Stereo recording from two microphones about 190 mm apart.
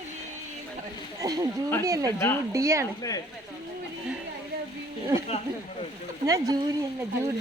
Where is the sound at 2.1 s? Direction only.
10° left (ahead or behind).